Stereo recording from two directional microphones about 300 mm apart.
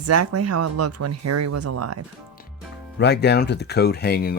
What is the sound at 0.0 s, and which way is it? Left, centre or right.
Speech, right.